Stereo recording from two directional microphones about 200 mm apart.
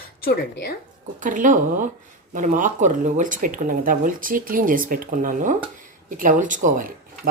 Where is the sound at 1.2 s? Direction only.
40° right (ahead or behind).